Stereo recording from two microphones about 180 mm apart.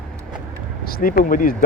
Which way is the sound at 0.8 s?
55° left (ahead or behind).